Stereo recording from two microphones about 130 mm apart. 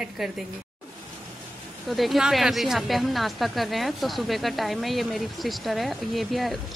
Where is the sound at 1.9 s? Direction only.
Centre (ahead or behind).